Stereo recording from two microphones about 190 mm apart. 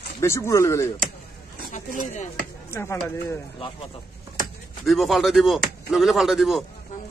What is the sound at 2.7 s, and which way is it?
Speech, 15° left (ahead or behind).